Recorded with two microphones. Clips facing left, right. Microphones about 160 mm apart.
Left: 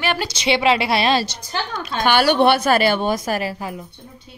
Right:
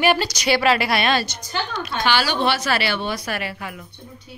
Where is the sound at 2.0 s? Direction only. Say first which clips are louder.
Left 6 dB; 55° left (ahead or behind).